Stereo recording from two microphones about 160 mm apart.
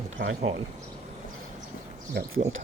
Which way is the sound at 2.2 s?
90° right.